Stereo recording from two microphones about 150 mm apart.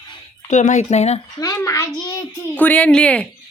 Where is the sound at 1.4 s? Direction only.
20° left (ahead or behind).